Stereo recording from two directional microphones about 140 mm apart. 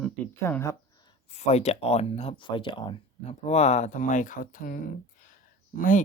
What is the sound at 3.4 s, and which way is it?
Speech, 55° left (ahead or behind).